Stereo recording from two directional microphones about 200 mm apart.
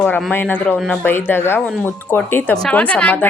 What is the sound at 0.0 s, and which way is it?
A woman's voice, 5° left (ahead or behind).